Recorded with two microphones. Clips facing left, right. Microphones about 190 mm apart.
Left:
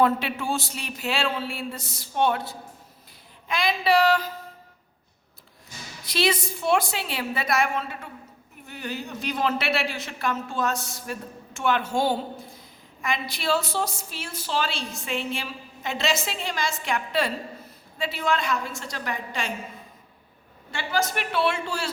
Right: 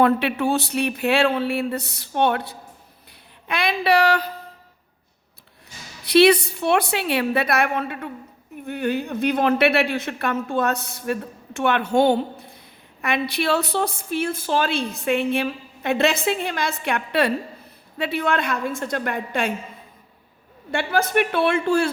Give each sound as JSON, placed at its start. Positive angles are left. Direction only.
{"t": 0.0, "sound": "speech", "side_deg": -65}
{"t": 6.1, "sound": "speech", "side_deg": -65}
{"t": 20.7, "sound": "speech", "side_deg": -60}